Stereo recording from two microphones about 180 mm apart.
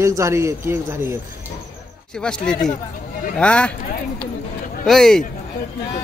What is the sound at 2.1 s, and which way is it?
Speech, 5° left (ahead or behind).